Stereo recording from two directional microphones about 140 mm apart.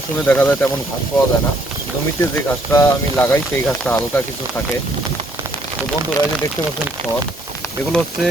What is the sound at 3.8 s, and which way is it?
Speech, 5° left (ahead or behind).